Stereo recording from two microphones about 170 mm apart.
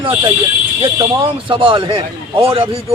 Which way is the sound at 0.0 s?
25° right (ahead or behind).